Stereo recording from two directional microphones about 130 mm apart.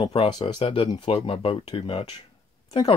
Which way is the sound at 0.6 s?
45° left (ahead or behind).